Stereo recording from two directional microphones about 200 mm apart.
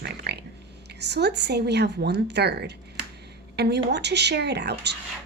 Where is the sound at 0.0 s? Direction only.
55° right (ahead or behind).